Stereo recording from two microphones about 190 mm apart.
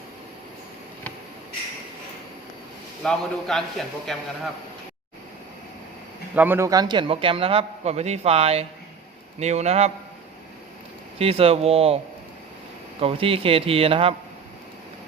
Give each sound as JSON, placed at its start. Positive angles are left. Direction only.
{"t": 3.0, "sound": "a man's voice", "side_deg": 0}
{"t": 6.3, "sound": "a man's voice", "side_deg": -10}
{"t": 11.2, "sound": "speech", "side_deg": -30}
{"t": 13.0, "sound": "a man's voice", "side_deg": -30}